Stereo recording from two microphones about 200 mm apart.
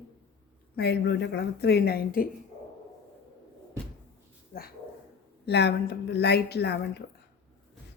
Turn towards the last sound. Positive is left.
turn(degrees=55)  # may be behind; listen again after turning